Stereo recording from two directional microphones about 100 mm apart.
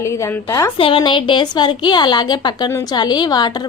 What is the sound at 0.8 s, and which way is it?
A woman's voice, 60° left (ahead or behind).